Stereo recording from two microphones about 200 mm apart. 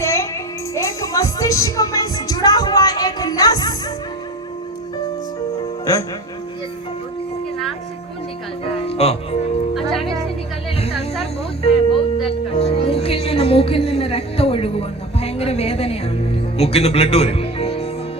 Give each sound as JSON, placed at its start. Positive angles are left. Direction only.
{"t": 0.0, "sound": "music", "side_deg": 15}
{"t": 5.8, "sound": "speech", "side_deg": 15}
{"t": 8.6, "sound": "music", "side_deg": 30}
{"t": 9.7, "sound": "music", "side_deg": 0}
{"t": 10.8, "sound": "a sound", "side_deg": 30}
{"t": 11.2, "sound": "music", "side_deg": 30}